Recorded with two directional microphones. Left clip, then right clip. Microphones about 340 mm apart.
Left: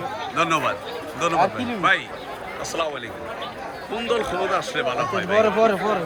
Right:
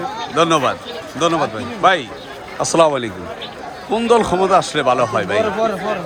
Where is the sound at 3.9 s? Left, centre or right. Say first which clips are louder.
Right 10 dB; centre.